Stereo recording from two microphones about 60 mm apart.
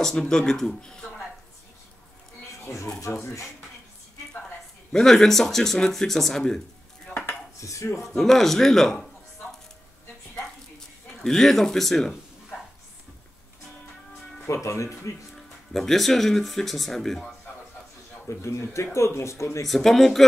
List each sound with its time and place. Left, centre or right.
0.0 s speech: centre
2.6 s speech: left
4.9 s speech: centre
7.1 s dishes: centre
7.6 s speech: left
8.1 s a man's voice: centre
11.1 s speech: centre
14.5 s speech: left
15.3 s speech: centre
18.3 s speech: left
19.6 s a man's voice: centre